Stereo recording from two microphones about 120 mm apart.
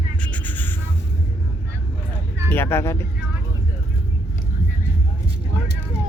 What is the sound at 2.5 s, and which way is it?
Speech, 20° left (ahead or behind).